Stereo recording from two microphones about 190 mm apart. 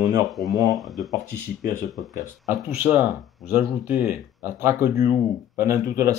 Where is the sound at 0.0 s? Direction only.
20° right (ahead or behind).